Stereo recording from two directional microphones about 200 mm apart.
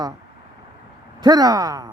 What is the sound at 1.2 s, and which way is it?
Speech, 20° right (ahead or behind).